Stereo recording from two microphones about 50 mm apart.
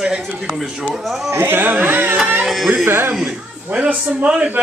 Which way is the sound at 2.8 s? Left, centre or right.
Right.